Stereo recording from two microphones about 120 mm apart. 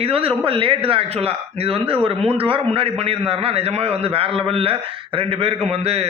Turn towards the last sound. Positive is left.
turn(degrees=-60)  # may be behind; listen again after turning